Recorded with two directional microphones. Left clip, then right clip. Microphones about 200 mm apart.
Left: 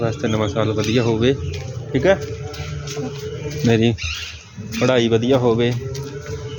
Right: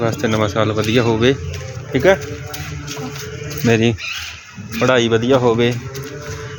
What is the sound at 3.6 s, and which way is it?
Speech, centre (ahead or behind).